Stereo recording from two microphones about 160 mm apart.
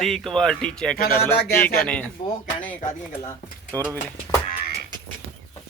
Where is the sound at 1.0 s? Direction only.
70° left (ahead or behind).